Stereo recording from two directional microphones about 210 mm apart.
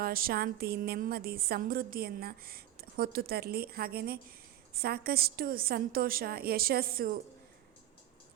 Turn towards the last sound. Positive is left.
turn(degrees=-45)  # may be behind; listen again after turning